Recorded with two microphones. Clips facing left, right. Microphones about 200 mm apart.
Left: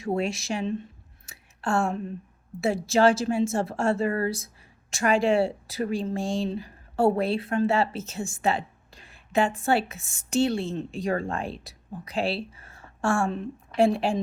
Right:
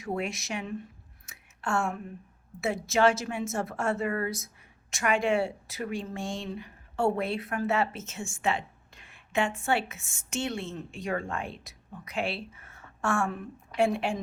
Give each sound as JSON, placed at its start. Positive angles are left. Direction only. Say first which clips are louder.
{"t": 0.0, "sound": "speech", "louder": "left 5 dB", "side_deg": 30}
{"t": 1.3, "sound": "a sound", "louder": "left 4 dB", "side_deg": 35}
{"t": 2.6, "sound": "speech", "louder": "left 4 dB", "side_deg": 30}